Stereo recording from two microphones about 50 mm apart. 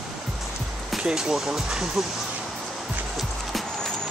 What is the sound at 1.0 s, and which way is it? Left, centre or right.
Speech, centre.